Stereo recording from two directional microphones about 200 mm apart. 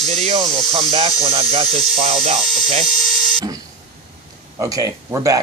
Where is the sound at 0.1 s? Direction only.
30° right (ahead or behind).